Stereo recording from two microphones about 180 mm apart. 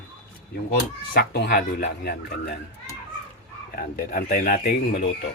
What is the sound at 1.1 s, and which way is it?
Speech, 60° left (ahead or behind).